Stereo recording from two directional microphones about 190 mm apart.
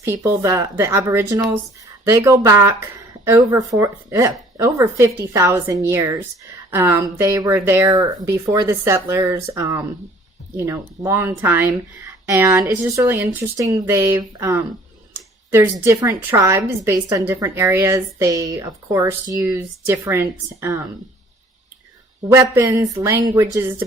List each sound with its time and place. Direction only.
0.0 s speech: 15° right (ahead or behind)
22.3 s speech: 15° right (ahead or behind)